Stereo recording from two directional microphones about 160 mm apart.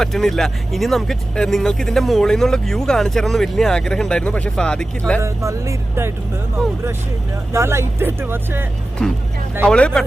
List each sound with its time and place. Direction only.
0.0 s speech: 5° left (ahead or behind)
5.2 s speech: 20° right (ahead or behind)
7.5 s speech: 15° right (ahead or behind)
9.0 s speech: 5° left (ahead or behind)